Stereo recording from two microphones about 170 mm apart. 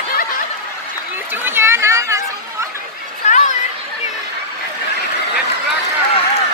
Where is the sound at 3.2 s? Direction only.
45° left (ahead or behind).